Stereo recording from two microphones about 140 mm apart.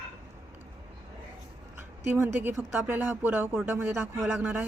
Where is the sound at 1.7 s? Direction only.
15° right (ahead or behind).